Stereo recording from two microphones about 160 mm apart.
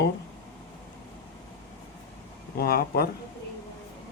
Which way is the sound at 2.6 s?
75° left (ahead or behind).